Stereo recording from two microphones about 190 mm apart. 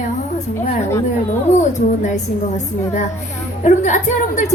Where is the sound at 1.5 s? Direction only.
40° left (ahead or behind).